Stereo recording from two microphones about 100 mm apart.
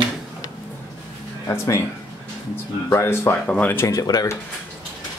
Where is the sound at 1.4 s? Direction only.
30° left (ahead or behind).